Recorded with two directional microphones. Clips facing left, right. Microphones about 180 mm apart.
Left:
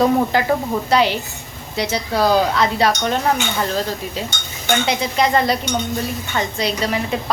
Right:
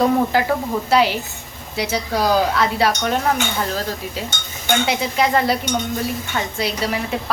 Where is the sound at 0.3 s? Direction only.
5° right (ahead or behind).